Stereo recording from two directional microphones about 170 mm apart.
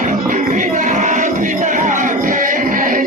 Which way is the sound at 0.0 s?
50° right (ahead or behind).